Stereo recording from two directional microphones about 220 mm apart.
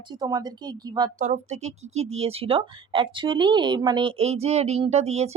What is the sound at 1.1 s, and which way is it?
Speech, 35° right (ahead or behind).